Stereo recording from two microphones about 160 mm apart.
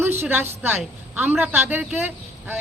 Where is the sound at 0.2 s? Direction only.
15° right (ahead or behind).